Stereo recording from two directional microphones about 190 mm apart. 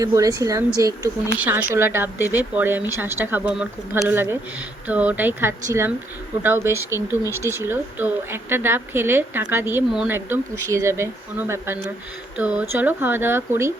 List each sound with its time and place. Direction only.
0.0 s speech: 15° right (ahead or behind)